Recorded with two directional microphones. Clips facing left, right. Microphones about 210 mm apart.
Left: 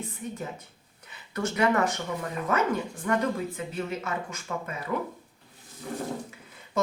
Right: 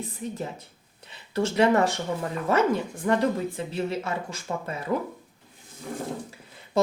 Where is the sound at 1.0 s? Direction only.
30° right (ahead or behind).